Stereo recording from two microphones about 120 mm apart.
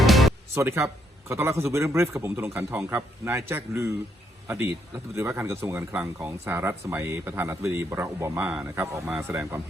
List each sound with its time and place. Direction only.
0.0 s music: centre (ahead or behind)
0.5 s speech: 20° right (ahead or behind)
5.1 s speech: 25° right (ahead or behind)